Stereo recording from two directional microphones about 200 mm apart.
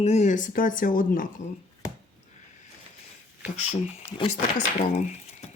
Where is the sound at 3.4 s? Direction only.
35° left (ahead or behind).